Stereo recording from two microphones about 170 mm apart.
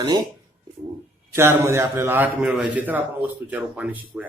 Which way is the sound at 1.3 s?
15° right (ahead or behind).